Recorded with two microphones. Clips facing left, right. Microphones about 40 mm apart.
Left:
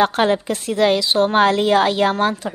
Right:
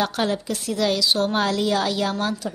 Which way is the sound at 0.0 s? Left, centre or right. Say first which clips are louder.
Left 7 dB; left.